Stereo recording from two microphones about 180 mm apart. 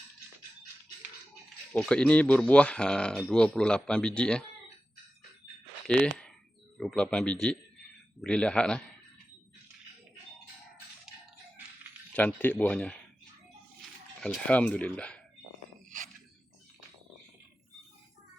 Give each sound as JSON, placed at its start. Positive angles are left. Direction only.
{"t": 1.7, "sound": "speech", "side_deg": 5}
{"t": 5.8, "sound": "speech", "side_deg": 5}
{"t": 12.1, "sound": "speech", "side_deg": 10}
{"t": 14.2, "sound": "speech", "side_deg": 5}